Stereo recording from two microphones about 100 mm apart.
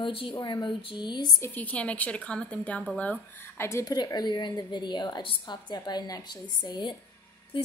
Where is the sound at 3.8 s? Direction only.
40° left (ahead or behind).